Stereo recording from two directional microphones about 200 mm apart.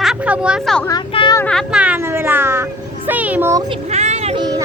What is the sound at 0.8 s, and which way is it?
Speech, 20° left (ahead or behind).